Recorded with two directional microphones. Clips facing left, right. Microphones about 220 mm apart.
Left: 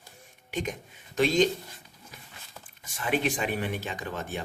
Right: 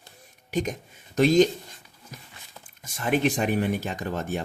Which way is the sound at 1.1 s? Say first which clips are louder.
Right 5 dB; 45° right (ahead or behind).